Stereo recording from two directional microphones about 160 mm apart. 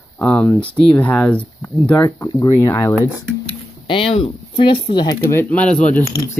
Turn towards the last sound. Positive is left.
turn(degrees=10)  # may be behind; listen again after turning